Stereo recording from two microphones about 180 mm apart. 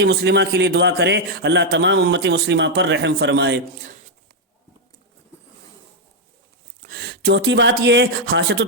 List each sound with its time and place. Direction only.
0.0 s a man's voice: 75° right (ahead or behind)
6.8 s speech: 60° right (ahead or behind)